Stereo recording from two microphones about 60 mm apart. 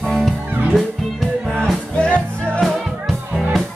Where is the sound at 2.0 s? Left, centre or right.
Centre.